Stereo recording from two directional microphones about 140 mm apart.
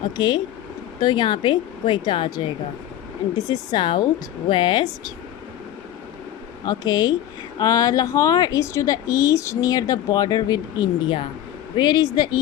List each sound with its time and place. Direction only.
0.2 s speech: 30° left (ahead or behind)
6.7 s speech: 30° left (ahead or behind)